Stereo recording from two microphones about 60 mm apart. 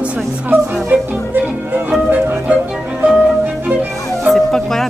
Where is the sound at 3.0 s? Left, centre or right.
Centre.